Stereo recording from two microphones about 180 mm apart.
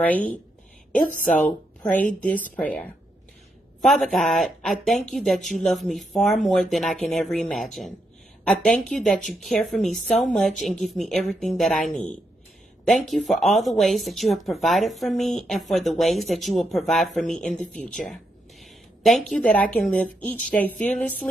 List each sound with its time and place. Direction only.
0.0 s a woman's voice: 10° left (ahead or behind)
1.1 s speech: 50° left (ahead or behind)
2.5 s a woman's voice: 5° left (ahead or behind)